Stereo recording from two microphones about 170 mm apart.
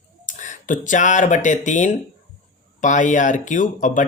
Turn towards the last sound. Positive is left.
turn(degrees=50)  # may be behind; listen again after turning